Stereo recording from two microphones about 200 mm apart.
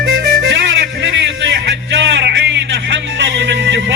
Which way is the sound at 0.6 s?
65° right (ahead or behind).